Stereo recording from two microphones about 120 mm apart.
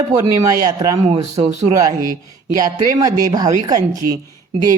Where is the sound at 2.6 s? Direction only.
30° right (ahead or behind).